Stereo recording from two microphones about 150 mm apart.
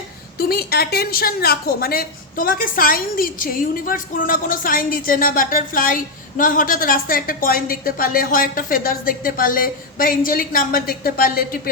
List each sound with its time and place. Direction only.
0.3 s a woman's voice: 90° left